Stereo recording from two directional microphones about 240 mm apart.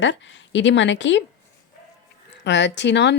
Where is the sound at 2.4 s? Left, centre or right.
Left.